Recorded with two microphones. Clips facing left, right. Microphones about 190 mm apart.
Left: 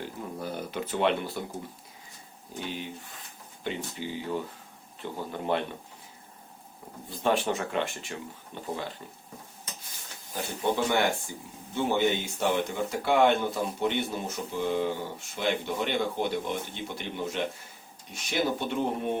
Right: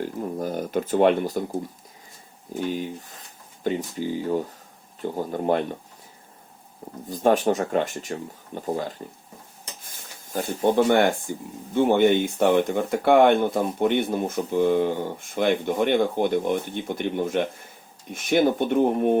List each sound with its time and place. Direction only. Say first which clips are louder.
0.0 s speech: right 8 dB; 45° right (ahead or behind)
2.6 s speech: right 8 dB; 40° right (ahead or behind)
7.1 s speech: right 7 dB; 45° right (ahead or behind)
10.3 s speech: right 8 dB; 45° right (ahead or behind)